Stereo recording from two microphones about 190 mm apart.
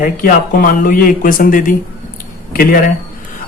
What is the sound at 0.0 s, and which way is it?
Speech, 45° left (ahead or behind).